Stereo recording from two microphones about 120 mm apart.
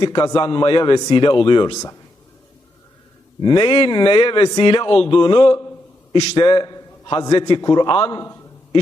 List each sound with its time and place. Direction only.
0.1 s a man's voice: 30° left (ahead or behind)
0.3 s a man's voice: 45° left (ahead or behind)
3.4 s a man's voice: 45° left (ahead or behind)
8.2 s a man's voice: 25° left (ahead or behind)